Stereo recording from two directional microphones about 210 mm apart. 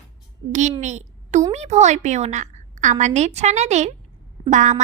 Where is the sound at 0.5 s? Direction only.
35° right (ahead or behind).